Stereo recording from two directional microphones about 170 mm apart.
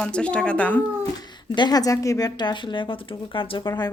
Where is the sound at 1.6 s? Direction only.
25° left (ahead or behind).